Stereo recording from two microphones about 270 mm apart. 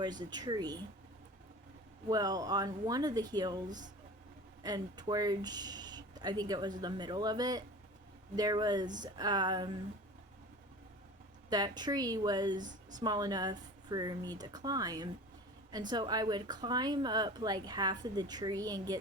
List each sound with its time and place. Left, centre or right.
0.0 s speech: centre
2.0 s speech: centre
4.6 s speech: centre
11.4 s speech: centre